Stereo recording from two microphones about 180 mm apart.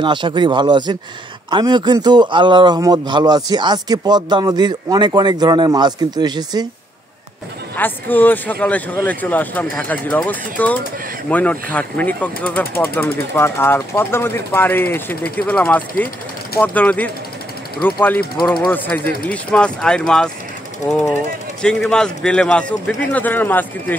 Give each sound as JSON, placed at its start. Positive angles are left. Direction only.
{"t": 0.0, "sound": "a man's voice", "side_deg": -25}
{"t": 7.7, "sound": "a man's voice", "side_deg": 10}
{"t": 21.6, "sound": "a man's voice", "side_deg": 0}